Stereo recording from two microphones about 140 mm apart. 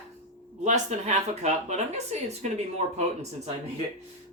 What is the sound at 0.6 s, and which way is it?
Speech, 55° right (ahead or behind).